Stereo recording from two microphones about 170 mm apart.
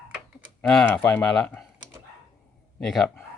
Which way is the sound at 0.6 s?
5° left (ahead or behind).